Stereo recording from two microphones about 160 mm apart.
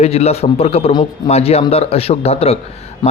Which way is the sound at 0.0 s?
40° left (ahead or behind).